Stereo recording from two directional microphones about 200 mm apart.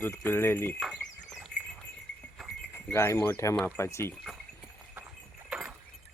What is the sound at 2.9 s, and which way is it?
Speech, 10° left (ahead or behind).